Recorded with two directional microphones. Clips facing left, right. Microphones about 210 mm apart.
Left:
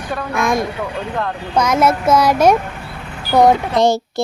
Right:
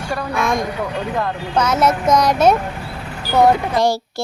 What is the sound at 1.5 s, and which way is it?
Speech, 10° left (ahead or behind).